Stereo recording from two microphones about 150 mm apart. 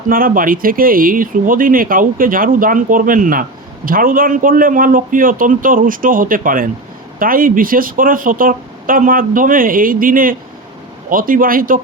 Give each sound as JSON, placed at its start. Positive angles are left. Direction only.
{"t": 0.1, "sound": "speech", "side_deg": -70}